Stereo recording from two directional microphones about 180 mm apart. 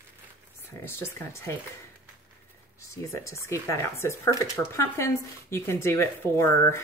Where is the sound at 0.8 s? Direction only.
15° left (ahead or behind).